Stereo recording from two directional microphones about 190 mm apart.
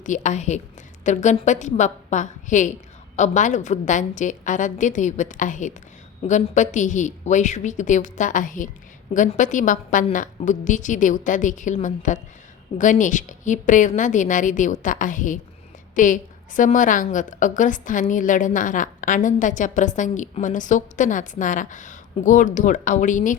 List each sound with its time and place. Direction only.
0.0 s a woman's voice: 40° left (ahead or behind)